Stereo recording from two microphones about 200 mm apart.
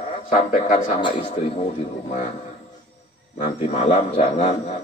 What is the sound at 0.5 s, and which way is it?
A man's voice, 35° left (ahead or behind).